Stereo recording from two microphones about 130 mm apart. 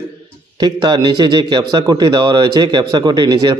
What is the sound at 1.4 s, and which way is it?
A man's voice, 30° right (ahead or behind).